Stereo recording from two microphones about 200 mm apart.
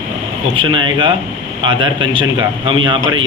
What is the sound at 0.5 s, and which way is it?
A man's voice, 25° right (ahead or behind).